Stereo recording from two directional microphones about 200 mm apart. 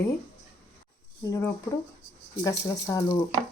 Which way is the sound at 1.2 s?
15° left (ahead or behind).